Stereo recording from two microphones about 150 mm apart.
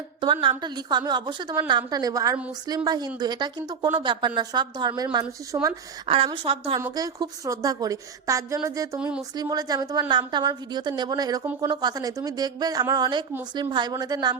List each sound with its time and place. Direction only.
0.4 s a woman's voice: 30° right (ahead or behind)
6.1 s a woman's voice: 40° right (ahead or behind)
6.7 s a woman's voice: 25° right (ahead or behind)
9.0 s speech: 5° right (ahead or behind)
9.3 s a woman's voice: 25° right (ahead or behind)